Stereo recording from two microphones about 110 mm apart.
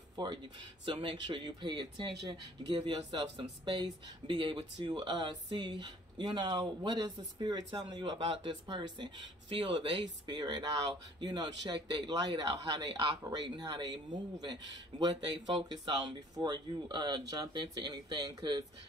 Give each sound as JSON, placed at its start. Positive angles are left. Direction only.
{"t": 0.1, "sound": "a sound", "side_deg": -40}
{"t": 0.8, "sound": "speech", "side_deg": -45}
{"t": 8.2, "sound": "speech", "side_deg": -55}
{"t": 8.7, "sound": "a man's voice", "side_deg": -45}